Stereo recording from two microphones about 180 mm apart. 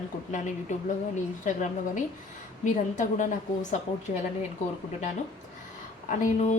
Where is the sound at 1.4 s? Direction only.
45° left (ahead or behind).